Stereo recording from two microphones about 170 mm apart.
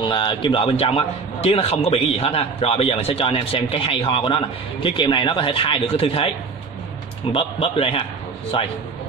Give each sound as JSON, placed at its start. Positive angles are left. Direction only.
{"t": 0.0, "sound": "a man's voice", "side_deg": 30}
{"t": 7.3, "sound": "a man's voice", "side_deg": 35}